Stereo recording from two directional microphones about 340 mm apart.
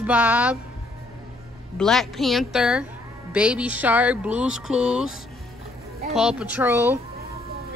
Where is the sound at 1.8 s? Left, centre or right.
Centre.